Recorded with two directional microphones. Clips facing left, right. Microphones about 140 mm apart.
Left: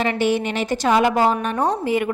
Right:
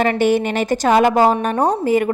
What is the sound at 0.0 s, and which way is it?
A woman's voice, 50° right (ahead or behind).